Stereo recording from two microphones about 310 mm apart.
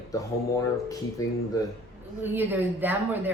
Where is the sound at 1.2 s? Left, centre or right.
Centre.